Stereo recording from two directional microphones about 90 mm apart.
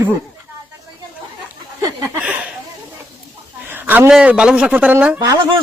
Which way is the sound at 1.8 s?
45° right (ahead or behind).